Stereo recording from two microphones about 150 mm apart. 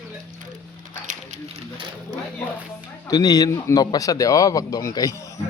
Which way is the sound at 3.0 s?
25° left (ahead or behind).